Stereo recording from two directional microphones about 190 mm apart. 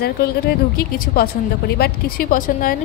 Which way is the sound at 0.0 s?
55° left (ahead or behind).